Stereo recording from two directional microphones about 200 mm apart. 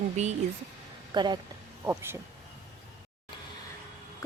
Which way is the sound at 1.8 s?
10° right (ahead or behind).